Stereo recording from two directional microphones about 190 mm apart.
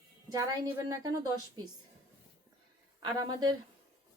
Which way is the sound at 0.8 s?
20° right (ahead or behind).